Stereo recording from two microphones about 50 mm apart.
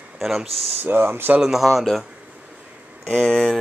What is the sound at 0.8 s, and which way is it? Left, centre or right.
Speech, right.